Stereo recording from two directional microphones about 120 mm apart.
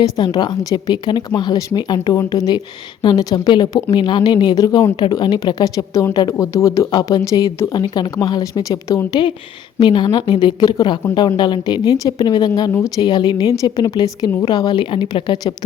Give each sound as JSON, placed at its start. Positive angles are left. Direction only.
{"t": 0.2, "sound": "a woman's voice", "side_deg": 35}